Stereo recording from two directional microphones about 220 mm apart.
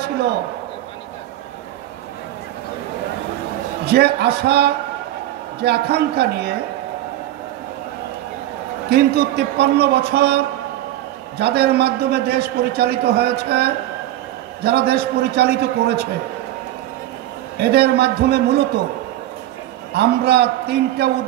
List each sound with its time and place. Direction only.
3.8 s a man's voice: 45° right (ahead or behind)
8.8 s a man's voice: 45° right (ahead or behind)
17.6 s a man's voice: 50° right (ahead or behind)
19.9 s a man's voice: 50° right (ahead or behind)